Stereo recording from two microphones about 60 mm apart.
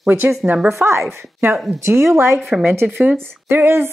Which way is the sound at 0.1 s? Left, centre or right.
Right.